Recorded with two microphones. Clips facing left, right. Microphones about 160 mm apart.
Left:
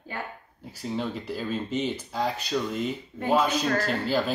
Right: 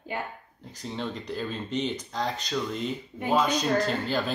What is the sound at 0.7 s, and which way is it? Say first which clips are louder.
Speech: left 3 dB; 5° left (ahead or behind).